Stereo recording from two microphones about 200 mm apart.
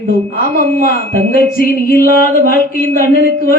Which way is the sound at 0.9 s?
45° left (ahead or behind).